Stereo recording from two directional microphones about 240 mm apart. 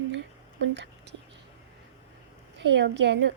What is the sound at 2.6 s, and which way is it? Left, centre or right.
Speech, right.